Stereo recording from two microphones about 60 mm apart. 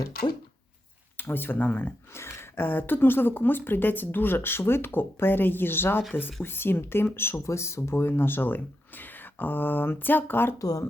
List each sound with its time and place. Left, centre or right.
1.1 s speech: left
7.4 s speech: left
10.6 s speech: left